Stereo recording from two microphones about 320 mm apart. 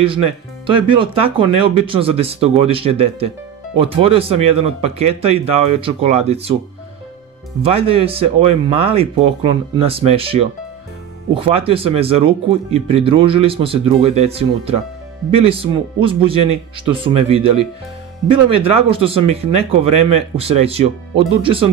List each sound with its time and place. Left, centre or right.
0.7 s speech: centre
7.6 s speech: centre